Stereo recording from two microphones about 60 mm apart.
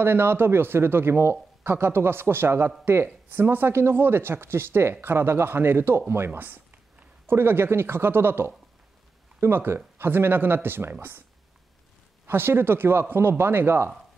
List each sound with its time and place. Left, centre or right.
0.0 s speech: right
12.3 s speech: right